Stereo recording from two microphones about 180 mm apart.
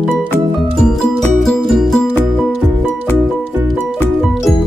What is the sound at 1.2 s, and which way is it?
Music, centre (ahead or behind).